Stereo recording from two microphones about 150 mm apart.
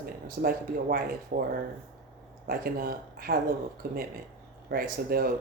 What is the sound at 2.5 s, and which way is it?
Speech, 80° right.